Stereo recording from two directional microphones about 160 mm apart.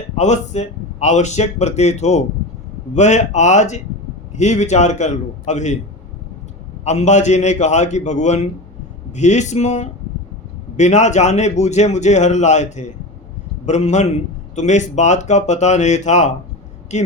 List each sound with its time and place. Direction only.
0.2 s a man's voice: 45° left (ahead or behind)
6.8 s a man's voice: 45° left (ahead or behind)